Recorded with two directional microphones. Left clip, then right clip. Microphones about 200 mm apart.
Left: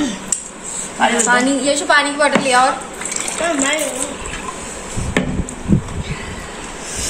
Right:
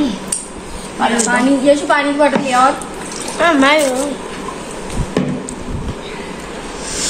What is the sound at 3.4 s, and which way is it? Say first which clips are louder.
Speech: right 7 dB; 20° right (ahead or behind).